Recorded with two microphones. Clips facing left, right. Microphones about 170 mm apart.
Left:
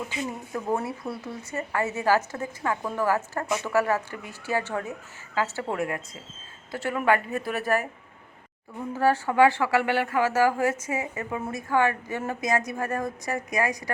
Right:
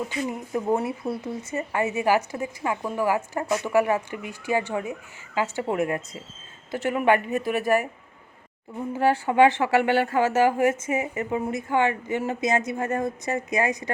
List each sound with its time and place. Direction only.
0.3 s speech: 15° right (ahead or behind)
9.0 s speech: 15° right (ahead or behind)